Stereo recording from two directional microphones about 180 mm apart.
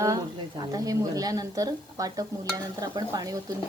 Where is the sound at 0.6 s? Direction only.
20° right (ahead or behind).